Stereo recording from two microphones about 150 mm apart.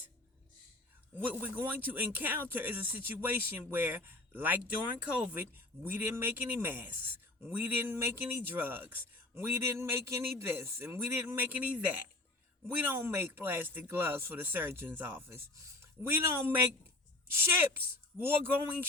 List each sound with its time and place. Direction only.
1.2 s speech: 10° right (ahead or behind)